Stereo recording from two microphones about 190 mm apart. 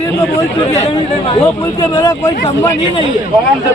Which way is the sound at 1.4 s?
20° left (ahead or behind).